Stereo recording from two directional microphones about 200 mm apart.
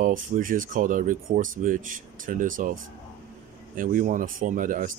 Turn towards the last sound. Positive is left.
turn(degrees=-40)  # may be behind; listen again after turning